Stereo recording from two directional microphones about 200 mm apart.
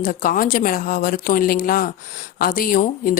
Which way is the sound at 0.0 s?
45° left (ahead or behind).